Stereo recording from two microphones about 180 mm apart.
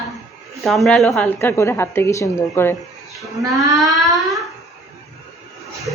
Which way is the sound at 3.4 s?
20° right (ahead or behind).